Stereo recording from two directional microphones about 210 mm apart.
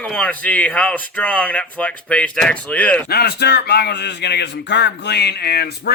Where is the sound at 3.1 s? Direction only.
50° left (ahead or behind).